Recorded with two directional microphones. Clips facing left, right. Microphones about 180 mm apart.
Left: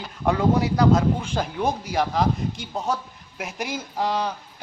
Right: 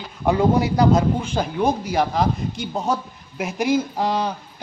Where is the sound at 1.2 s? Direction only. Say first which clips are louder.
Right 4 dB; 5° right (ahead or behind).